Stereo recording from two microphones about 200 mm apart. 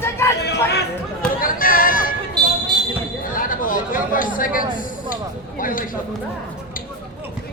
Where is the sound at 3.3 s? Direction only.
45° left (ahead or behind).